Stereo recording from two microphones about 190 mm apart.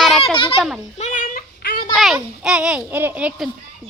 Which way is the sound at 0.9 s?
40° left (ahead or behind).